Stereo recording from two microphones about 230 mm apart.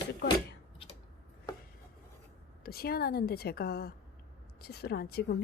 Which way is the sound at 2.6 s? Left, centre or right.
Left.